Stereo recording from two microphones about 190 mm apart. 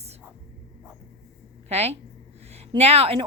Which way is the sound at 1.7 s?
35° right (ahead or behind).